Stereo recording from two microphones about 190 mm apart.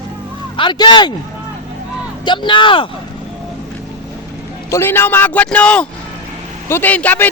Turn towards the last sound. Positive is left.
turn(degrees=10)  # may be behind; listen again after turning